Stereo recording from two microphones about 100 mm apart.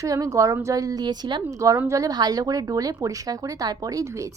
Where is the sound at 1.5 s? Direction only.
30° right (ahead or behind).